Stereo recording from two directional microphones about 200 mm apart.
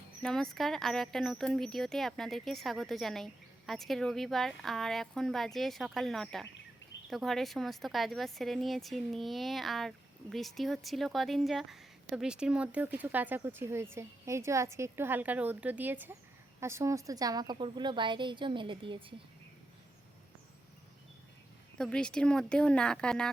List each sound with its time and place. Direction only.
0.2 s a woman's voice: 5° left (ahead or behind); by 19.0 s 25° right (ahead or behind)
21.8 s speech: 5° left (ahead or behind)